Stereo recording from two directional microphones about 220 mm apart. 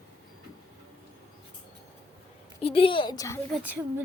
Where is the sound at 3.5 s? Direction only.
10° right (ahead or behind).